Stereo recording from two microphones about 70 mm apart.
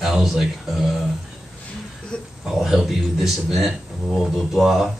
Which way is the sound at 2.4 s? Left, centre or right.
Centre.